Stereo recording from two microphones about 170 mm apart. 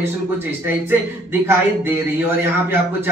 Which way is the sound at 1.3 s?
15° right (ahead or behind).